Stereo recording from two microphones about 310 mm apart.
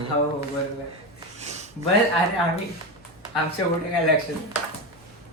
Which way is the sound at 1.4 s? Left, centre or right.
Right.